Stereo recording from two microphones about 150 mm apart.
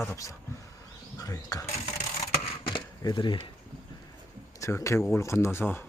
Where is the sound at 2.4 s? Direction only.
35° left (ahead or behind).